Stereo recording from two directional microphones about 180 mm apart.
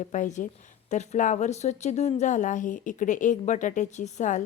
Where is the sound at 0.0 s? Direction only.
45° left (ahead or behind).